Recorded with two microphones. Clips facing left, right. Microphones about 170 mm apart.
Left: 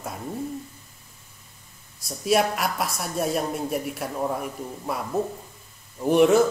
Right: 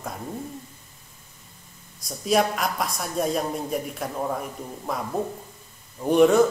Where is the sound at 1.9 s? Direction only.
5° left (ahead or behind).